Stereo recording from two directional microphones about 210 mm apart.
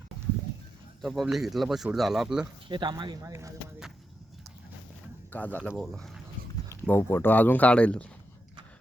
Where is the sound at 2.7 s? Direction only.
20° right (ahead or behind).